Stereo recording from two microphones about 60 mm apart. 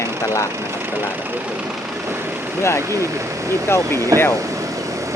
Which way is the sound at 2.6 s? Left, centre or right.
Left.